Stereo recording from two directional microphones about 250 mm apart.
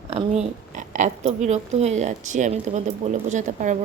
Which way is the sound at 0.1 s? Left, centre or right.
Right.